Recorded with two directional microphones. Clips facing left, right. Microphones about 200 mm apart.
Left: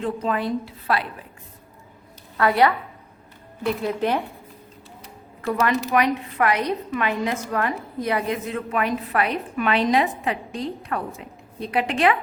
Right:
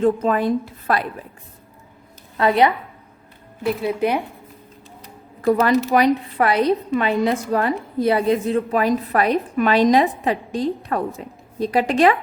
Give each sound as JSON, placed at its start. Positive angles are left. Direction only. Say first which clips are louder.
{"t": 0.0, "sound": "a woman's voice", "louder": "right 7 dB", "side_deg": -45}
{"t": 2.4, "sound": "a woman's voice", "louder": "right 2 dB", "side_deg": -20}
{"t": 3.6, "sound": "speech", "louder": "right 3 dB", "side_deg": -5}
{"t": 5.4, "sound": "a woman's voice", "louder": "right 6 dB", "side_deg": -35}